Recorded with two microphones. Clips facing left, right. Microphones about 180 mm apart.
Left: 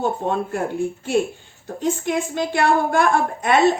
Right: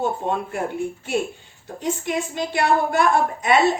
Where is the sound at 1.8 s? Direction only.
55° left (ahead or behind).